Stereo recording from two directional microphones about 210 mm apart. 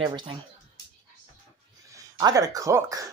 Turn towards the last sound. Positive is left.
turn(degrees=-15)  # may be behind; listen again after turning